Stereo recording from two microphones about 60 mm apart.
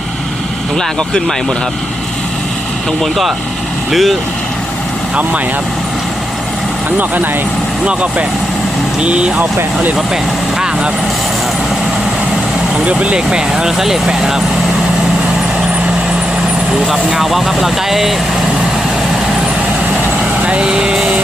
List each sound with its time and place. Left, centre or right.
0.8 s speech: centre
3.0 s speech: centre
7.0 s speech: right
9.0 s speech: centre
12.9 s speech: centre
16.9 s speech: centre
20.4 s vehicle: centre